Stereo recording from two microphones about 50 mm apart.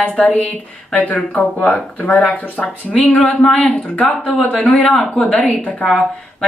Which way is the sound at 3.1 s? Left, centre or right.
Centre.